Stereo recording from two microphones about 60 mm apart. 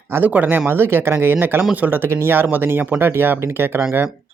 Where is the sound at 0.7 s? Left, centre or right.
Right.